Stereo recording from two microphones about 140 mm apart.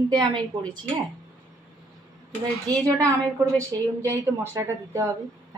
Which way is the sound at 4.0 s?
15° right (ahead or behind).